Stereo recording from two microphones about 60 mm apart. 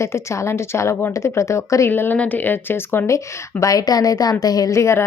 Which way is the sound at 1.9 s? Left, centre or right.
Left.